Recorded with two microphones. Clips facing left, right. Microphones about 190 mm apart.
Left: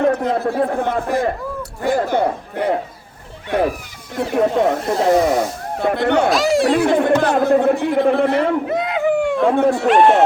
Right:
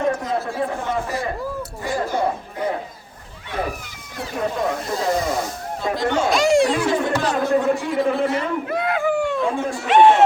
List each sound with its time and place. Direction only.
0.0 s chatter: 60° left (ahead or behind)
1.8 s a sound: 60° left (ahead or behind)
4.3 s speech: 65° left (ahead or behind)
6.3 s speech: centre (ahead or behind)
6.8 s speech: 55° left (ahead or behind)
8.7 s a sound: 20° left (ahead or behind)
9.4 s speech: 60° left (ahead or behind)
9.8 s speech: centre (ahead or behind)